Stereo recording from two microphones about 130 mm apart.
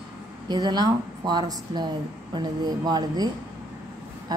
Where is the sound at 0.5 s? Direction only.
35° right (ahead or behind).